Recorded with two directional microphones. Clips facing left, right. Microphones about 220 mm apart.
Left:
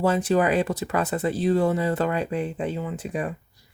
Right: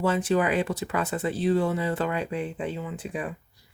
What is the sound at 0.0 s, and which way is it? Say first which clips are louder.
Speech: left 3 dB; 40° left (ahead or behind).